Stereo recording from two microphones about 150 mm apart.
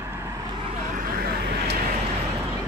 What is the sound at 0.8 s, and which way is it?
Vehicle, 65° right (ahead or behind).